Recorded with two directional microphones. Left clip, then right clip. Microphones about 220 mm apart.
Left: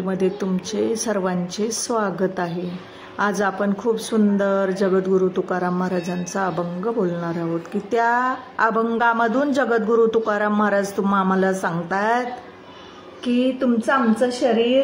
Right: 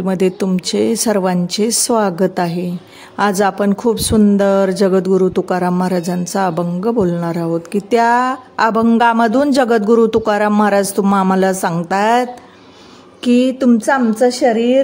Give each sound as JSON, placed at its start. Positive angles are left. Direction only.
{"t": 0.0, "sound": "speech", "side_deg": -55}